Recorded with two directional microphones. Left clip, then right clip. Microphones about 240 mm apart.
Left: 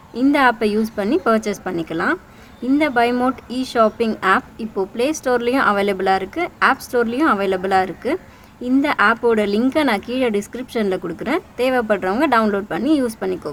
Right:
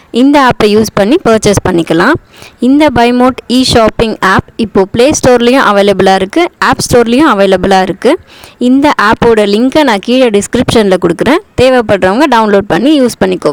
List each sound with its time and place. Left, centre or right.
0.1 s speech: right